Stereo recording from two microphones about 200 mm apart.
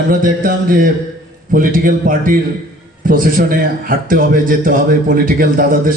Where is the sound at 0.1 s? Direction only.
45° right (ahead or behind).